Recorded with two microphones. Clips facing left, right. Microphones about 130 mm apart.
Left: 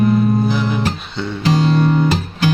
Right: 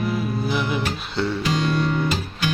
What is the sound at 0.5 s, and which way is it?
Music, 5° right (ahead or behind).